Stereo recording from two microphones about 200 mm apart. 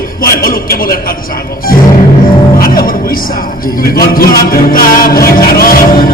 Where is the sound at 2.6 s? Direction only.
45° left (ahead or behind).